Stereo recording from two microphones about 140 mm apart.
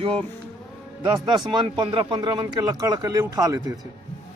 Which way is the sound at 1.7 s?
35° right (ahead or behind).